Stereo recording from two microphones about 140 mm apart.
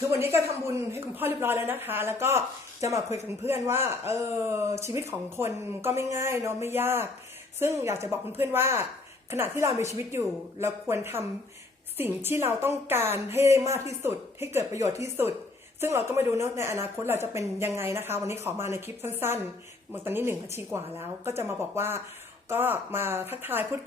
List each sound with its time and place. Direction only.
0.1 s speech: 20° right (ahead or behind)